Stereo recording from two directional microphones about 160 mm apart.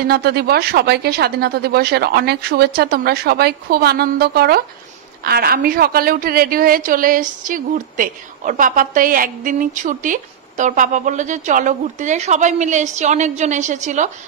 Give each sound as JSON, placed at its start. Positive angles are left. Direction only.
{"t": 0.1, "sound": "a woman's voice", "side_deg": -85}